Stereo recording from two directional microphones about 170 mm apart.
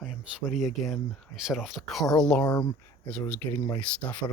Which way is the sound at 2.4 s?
25° left (ahead or behind).